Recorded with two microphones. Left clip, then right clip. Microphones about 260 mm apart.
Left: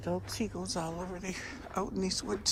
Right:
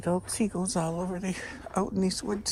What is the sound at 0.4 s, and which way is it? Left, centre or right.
Speech, right.